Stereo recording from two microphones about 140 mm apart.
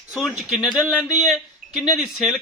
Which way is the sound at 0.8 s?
15° left (ahead or behind).